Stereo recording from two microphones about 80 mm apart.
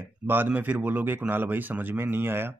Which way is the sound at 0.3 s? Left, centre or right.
Right.